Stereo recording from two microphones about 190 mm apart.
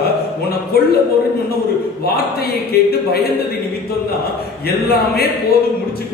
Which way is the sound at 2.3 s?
55° left (ahead or behind).